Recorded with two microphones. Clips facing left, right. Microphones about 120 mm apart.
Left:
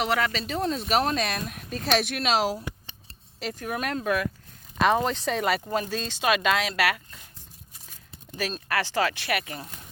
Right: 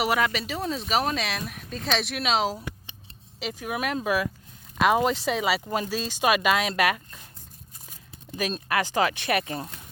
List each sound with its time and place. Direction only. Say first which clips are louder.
0.0 s speech: right 1 dB; 15° right (ahead or behind)
8.6 s speech: right 1 dB; 15° right (ahead or behind)